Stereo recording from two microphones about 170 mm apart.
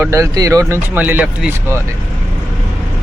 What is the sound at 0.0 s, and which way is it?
Speech, 20° right (ahead or behind).